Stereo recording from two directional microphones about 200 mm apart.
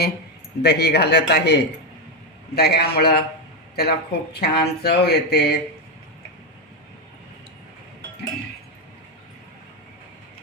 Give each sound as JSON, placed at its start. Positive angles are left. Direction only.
{"t": 0.6, "sound": "a man's voice", "side_deg": 55}
{"t": 2.6, "sound": "speech", "side_deg": 55}